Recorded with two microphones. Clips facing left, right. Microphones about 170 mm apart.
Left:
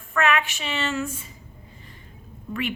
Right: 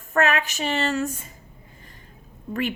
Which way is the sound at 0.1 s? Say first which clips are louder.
Right 1 dB; 40° right (ahead or behind).